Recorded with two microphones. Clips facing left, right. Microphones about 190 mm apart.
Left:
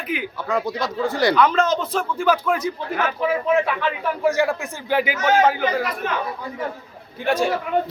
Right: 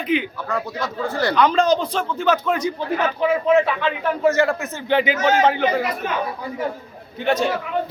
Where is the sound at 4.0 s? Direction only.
15° left (ahead or behind).